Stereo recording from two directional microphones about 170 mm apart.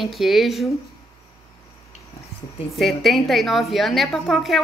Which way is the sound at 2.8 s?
Centre (ahead or behind).